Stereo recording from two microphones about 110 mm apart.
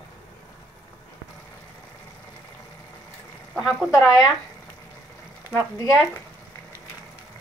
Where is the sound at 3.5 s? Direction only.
Centre (ahead or behind).